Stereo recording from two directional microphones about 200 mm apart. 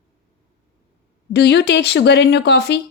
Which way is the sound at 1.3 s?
60° left (ahead or behind).